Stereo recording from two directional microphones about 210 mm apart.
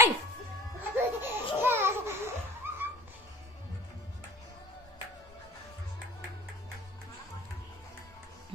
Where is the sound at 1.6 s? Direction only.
10° right (ahead or behind).